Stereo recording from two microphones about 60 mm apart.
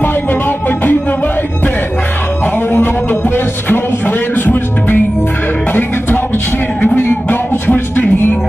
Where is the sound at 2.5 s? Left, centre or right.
Left.